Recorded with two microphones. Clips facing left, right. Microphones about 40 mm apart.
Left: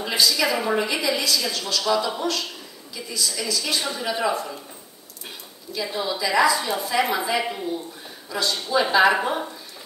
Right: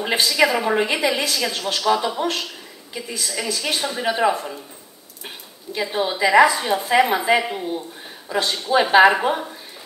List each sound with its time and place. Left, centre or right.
0.0 s a woman's voice: right